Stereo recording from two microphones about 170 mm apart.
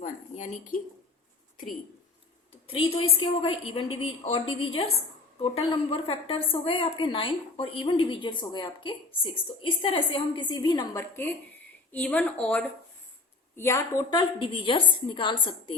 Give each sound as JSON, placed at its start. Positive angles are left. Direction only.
{"t": 0.0, "sound": "a sound", "side_deg": 45}
{"t": 2.6, "sound": "a woman's voice", "side_deg": 30}
{"t": 13.6, "sound": "a woman's voice", "side_deg": 15}